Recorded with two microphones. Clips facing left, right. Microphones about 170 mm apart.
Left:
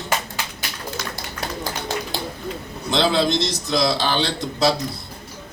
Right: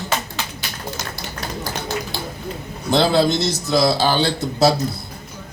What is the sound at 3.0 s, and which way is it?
A man's voice, 5° right (ahead or behind).